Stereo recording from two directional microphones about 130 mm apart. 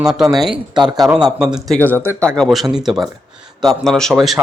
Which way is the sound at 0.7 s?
35° right (ahead or behind).